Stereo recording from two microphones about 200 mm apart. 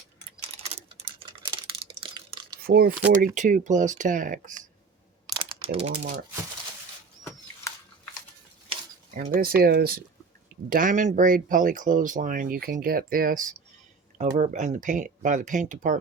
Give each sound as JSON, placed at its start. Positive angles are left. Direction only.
{"t": 0.6, "sound": "typing", "side_deg": -30}
{"t": 2.6, "sound": "speech", "side_deg": -50}
{"t": 5.2, "sound": "typing", "side_deg": -20}
{"t": 9.1, "sound": "speech", "side_deg": -45}